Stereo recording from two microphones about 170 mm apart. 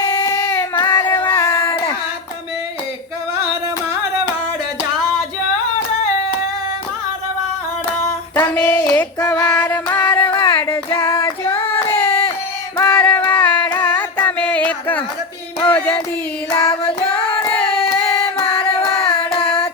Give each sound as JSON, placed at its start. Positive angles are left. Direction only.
{"t": 0.0, "sound": "child singing", "side_deg": 20}
{"t": 1.3, "sound": "a sound", "side_deg": 20}
{"t": 8.4, "sound": "female singing", "side_deg": 10}
{"t": 10.3, "sound": "child singing", "side_deg": 15}
{"t": 12.7, "sound": "music", "side_deg": 15}
{"t": 16.5, "sound": "child singing", "side_deg": 20}
{"t": 16.8, "sound": "music", "side_deg": 30}